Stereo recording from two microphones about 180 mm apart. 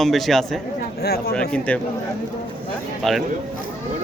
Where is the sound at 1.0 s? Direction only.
60° left (ahead or behind).